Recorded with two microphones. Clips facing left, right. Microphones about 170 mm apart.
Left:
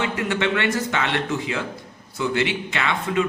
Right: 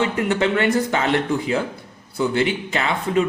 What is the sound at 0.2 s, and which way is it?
A man's voice, 35° right (ahead or behind).